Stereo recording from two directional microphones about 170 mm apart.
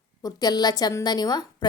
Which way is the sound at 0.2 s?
25° left (ahead or behind).